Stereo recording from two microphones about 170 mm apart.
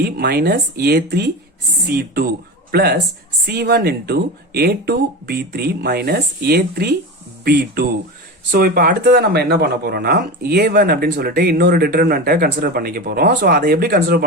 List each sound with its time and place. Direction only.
0.0 s speech: 65° right (ahead or behind)